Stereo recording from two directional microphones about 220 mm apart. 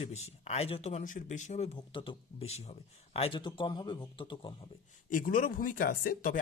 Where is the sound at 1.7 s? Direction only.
20° left (ahead or behind).